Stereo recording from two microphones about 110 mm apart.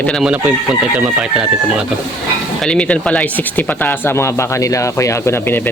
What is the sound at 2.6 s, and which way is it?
Speech, 10° left (ahead or behind).